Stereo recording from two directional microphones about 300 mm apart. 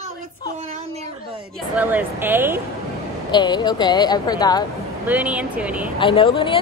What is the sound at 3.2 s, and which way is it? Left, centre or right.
A woman's voice, centre.